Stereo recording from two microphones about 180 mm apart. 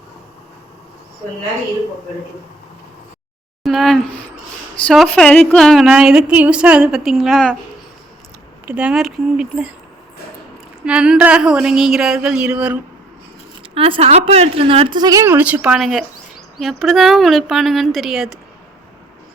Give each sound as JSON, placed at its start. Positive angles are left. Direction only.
{"t": 3.6, "sound": "a woman's voice", "side_deg": 0}
{"t": 8.6, "sound": "a woman's voice", "side_deg": -5}
{"t": 10.8, "sound": "a woman's voice", "side_deg": -5}
{"t": 13.6, "sound": "a woman's voice", "side_deg": -30}